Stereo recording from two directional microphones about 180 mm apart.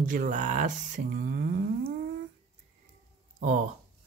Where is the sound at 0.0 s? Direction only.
50° right (ahead or behind).